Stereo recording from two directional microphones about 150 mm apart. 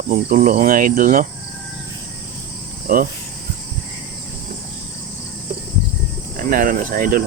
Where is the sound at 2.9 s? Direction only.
75° right (ahead or behind).